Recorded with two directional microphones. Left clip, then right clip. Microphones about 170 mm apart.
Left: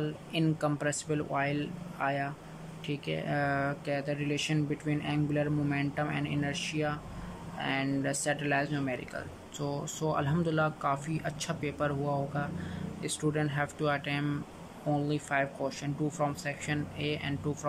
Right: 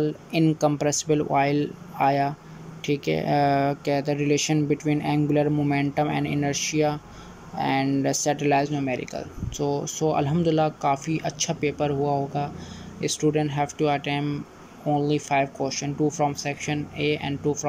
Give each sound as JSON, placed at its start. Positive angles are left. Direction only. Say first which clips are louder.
{"t": 0.0, "sound": "speech", "louder": "right 9 dB", "side_deg": -25}